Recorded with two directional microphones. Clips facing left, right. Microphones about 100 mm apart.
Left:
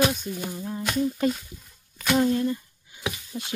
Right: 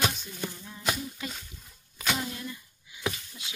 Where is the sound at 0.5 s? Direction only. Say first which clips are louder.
Left 8 dB; 40° left (ahead or behind).